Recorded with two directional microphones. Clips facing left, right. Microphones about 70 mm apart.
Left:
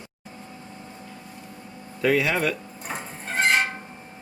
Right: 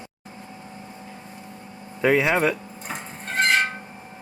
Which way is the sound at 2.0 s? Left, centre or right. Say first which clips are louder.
Right 3 dB; right.